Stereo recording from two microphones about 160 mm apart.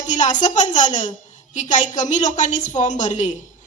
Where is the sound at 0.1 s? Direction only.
50° left (ahead or behind).